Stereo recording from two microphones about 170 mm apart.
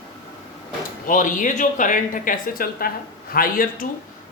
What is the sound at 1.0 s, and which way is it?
Speech, 50° left (ahead or behind).